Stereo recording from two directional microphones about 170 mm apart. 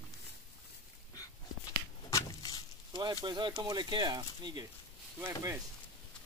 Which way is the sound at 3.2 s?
25° right (ahead or behind).